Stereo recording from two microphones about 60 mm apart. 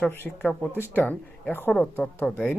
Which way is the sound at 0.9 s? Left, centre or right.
Left.